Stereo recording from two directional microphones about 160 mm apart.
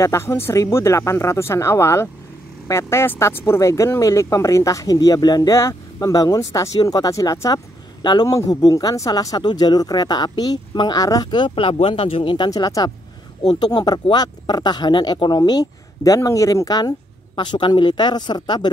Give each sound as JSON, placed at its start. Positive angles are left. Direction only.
{"t": 0.0, "sound": "speech", "side_deg": 20}